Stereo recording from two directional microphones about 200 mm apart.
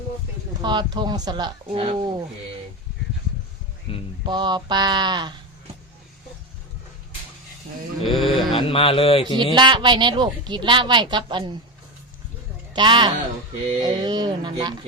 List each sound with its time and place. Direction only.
0.6 s a woman's voice: 20° right (ahead or behind)
3.9 s a sound: 30° left (ahead or behind)
4.3 s a woman's voice: 20° right (ahead or behind)
8.0 s speech: centre (ahead or behind)
8.5 s a man's voice: 25° left (ahead or behind)
9.6 s a woman's voice: 20° right (ahead or behind)
12.7 s a woman's voice: 25° right (ahead or behind)